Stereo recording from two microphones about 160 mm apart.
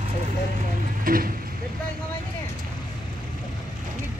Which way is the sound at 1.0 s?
65° right (ahead or behind).